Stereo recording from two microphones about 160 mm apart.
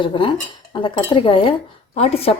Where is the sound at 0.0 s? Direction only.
30° left (ahead or behind).